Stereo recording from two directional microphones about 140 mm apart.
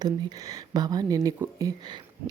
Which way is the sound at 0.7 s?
30° right (ahead or behind).